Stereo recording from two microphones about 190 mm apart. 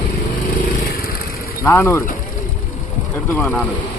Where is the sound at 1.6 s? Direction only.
15° left (ahead or behind).